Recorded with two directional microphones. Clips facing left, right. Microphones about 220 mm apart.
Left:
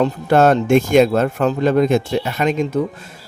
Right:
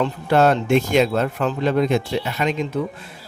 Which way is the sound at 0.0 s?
45° left (ahead or behind).